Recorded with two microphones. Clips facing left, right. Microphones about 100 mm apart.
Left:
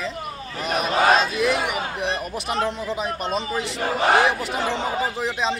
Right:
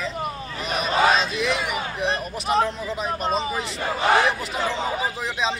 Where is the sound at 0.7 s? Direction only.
50° left (ahead or behind).